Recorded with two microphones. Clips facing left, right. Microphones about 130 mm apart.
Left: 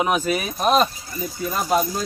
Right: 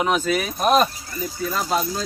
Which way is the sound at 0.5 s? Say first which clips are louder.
Even; centre (ahead or behind).